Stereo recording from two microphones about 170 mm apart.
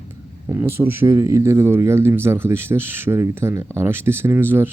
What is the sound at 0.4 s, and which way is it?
Speech, 15° right (ahead or behind).